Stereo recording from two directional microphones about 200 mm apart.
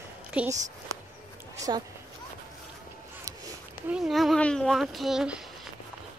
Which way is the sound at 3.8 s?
Centre (ahead or behind).